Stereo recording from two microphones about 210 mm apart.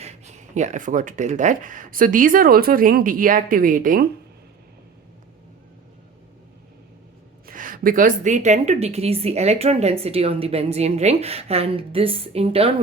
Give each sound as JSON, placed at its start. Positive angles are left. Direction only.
{"t": 0.0, "sound": "speech", "side_deg": -30}
{"t": 7.4, "sound": "a woman's voice", "side_deg": -40}